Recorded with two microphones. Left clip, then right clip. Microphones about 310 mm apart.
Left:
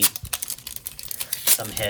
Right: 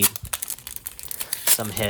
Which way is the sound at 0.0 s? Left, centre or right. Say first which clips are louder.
Left 1 dB; centre.